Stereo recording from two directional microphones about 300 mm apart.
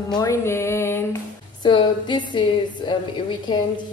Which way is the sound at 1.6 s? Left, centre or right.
Centre.